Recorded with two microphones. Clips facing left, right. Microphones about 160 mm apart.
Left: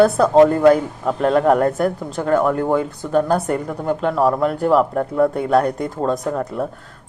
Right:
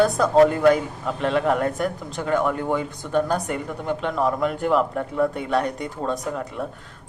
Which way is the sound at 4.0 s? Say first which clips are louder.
Left 5 dB; 35° left (ahead or behind).